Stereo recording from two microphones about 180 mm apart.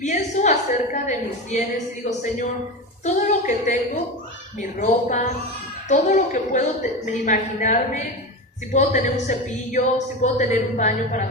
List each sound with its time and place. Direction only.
0.0 s a woman's voice: 40° left (ahead or behind)